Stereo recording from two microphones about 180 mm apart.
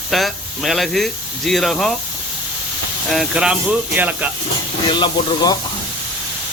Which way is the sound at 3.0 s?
Centre (ahead or behind).